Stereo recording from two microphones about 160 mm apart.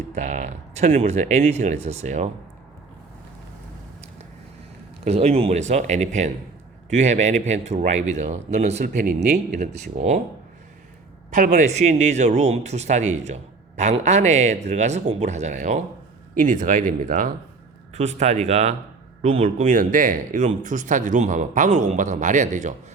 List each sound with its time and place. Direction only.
0.1 s speech: 45° right (ahead or behind)
5.0 s speech: 40° right (ahead or behind)
9.0 s speech: 80° right
9.5 s speech: 50° right (ahead or behind)
11.3 s speech: 55° right (ahead or behind)